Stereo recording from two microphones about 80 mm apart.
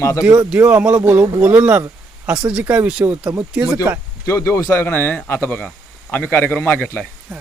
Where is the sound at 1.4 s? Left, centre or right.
Centre.